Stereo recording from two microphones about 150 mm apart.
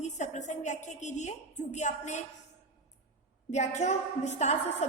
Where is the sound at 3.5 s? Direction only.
50° left (ahead or behind).